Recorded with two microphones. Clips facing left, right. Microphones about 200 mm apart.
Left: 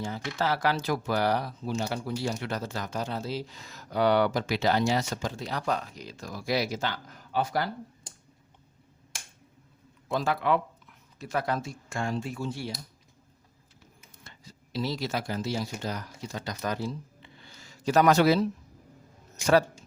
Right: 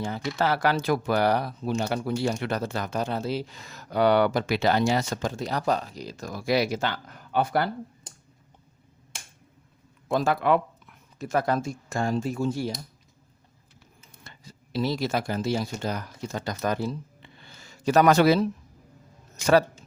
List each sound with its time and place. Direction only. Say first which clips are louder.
0.0 s speech: right 4 dB; 60° right (ahead or behind)
10.1 s speech: right 4 dB; 50° right (ahead or behind)
14.3 s speech: right 3 dB; 55° right (ahead or behind)